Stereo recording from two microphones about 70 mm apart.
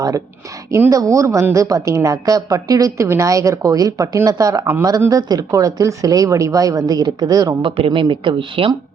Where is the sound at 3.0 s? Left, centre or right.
Right.